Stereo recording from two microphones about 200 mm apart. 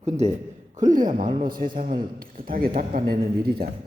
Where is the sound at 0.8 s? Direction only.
40° right (ahead or behind).